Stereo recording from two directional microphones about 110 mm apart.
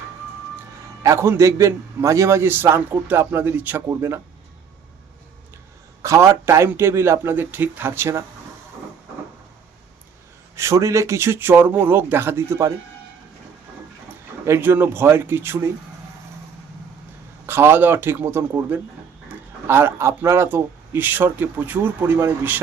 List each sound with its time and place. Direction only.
1.0 s a man's voice: 25° right (ahead or behind)
6.0 s a man's voice: 25° right (ahead or behind)
10.5 s a man's voice: 25° right (ahead or behind)
14.4 s a man's voice: 20° right (ahead or behind)
17.4 s a man's voice: 20° right (ahead or behind)